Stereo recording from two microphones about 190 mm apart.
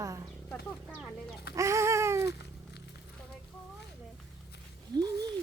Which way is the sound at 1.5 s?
15° right (ahead or behind).